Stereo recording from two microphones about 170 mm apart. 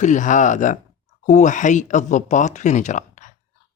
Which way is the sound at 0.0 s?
45° left (ahead or behind).